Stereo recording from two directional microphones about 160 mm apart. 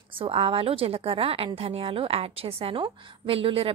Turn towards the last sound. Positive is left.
turn(degrees=-35)  # may be behind; listen again after turning